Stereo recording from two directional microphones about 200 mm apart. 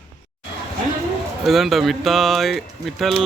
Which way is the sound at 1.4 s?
Centre (ahead or behind).